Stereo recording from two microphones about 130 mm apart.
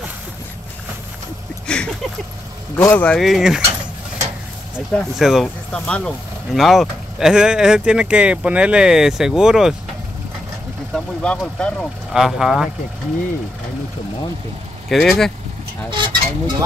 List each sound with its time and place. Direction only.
1.7 s speech: 5° left (ahead or behind)
4.9 s speech: centre (ahead or behind)
10.9 s speech: 5° left (ahead or behind)
12.1 s speech: 5° right (ahead or behind)
14.9 s speech: centre (ahead or behind)
15.9 s a sound: 35° right (ahead or behind)